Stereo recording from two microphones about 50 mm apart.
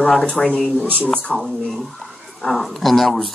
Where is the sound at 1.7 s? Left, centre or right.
Centre.